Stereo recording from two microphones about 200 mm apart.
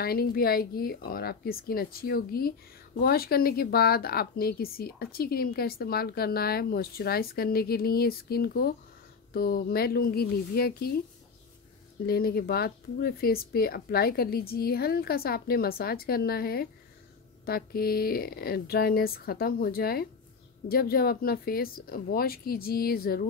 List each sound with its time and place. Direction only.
0.0 s a woman's voice: 50° left (ahead or behind)
12.1 s a woman's voice: 50° left (ahead or behind)